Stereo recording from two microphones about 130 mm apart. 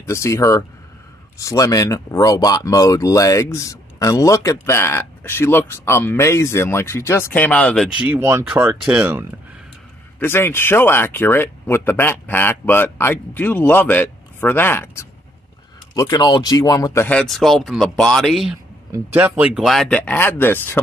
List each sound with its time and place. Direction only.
0.0 s speech: 20° left (ahead or behind); by 7.9 s 5° left (ahead or behind)
8.0 s speech: 15° right (ahead or behind)
8.5 s speech: 10° right (ahead or behind)
10.1 s speech: 15° left (ahead or behind)
15.9 s speech: 30° left (ahead or behind)
17.1 s speech: 5° left (ahead or behind)
19.1 s speech: 10° right (ahead or behind)
20.0 s speech: 15° left (ahead or behind)